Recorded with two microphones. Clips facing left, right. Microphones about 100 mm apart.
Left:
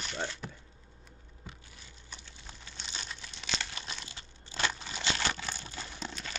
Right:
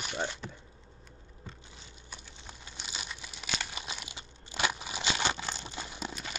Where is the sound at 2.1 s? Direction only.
15° right (ahead or behind).